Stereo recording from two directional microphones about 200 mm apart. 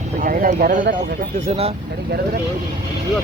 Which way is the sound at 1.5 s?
30° right (ahead or behind).